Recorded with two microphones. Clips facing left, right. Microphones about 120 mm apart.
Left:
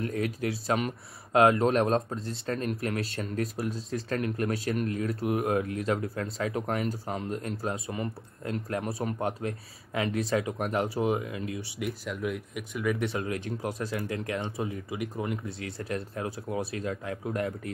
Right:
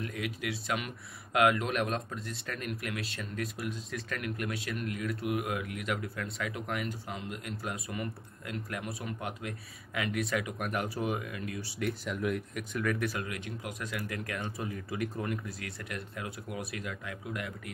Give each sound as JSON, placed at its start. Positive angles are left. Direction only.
{"t": 0.0, "sound": "speech", "side_deg": 35}
{"t": 11.8, "sound": "speech", "side_deg": 0}
{"t": 13.0, "sound": "speech", "side_deg": 30}